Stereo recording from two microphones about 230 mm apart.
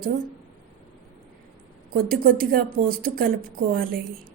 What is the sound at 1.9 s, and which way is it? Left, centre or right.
Speech, right.